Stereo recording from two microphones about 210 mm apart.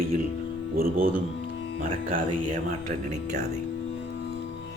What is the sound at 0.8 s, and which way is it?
Speech, 45° right (ahead or behind).